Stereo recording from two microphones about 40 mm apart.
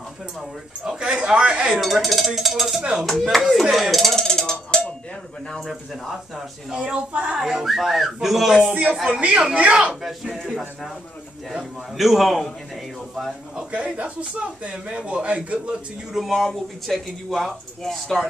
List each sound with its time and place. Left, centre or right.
0.8 s speech: right
1.8 s speech: centre
2.8 s speech: right
3.1 s speech: centre
4.2 s cowbell: centre
5.7 s speech: centre
6.7 s speech: right
7.3 s speech: centre
7.6 s speech: centre
9.2 s speech: right
9.8 s speech: centre
12.0 s speech: centre
13.7 s speech: right
16.1 s speech: centre